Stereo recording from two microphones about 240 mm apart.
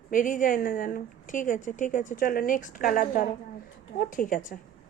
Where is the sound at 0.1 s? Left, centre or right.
Left.